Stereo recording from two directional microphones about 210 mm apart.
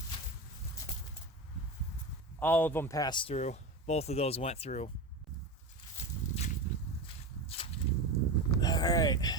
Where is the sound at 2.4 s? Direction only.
10° left (ahead or behind); by 4.9 s 30° left (ahead or behind).